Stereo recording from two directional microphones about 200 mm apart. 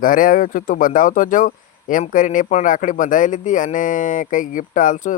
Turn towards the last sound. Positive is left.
turn(degrees=40)  # may be behind; listen again after turning